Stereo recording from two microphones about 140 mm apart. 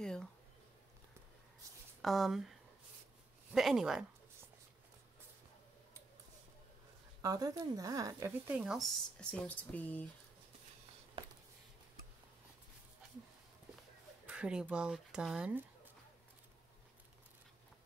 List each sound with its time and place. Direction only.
0.0 s a sound: 5° left (ahead or behind)
2.0 s speech: centre (ahead or behind)
3.5 s speech: 5° right (ahead or behind)
7.2 s speech: 25° right (ahead or behind)
8.5 s speech: 5° right (ahead or behind); by 10.0 s 10° left (ahead or behind)
14.2 s speech: 10° right (ahead or behind)